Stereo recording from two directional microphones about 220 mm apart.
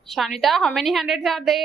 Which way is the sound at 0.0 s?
Centre (ahead or behind).